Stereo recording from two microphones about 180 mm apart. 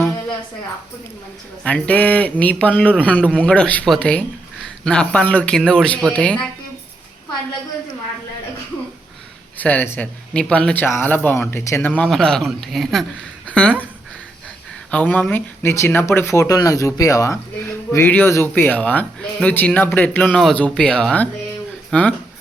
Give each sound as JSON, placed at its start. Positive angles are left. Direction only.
{"t": 1.6, "sound": "a man's voice", "side_deg": 5}
{"t": 9.6, "sound": "speech", "side_deg": 10}
{"t": 14.8, "sound": "speech", "side_deg": 10}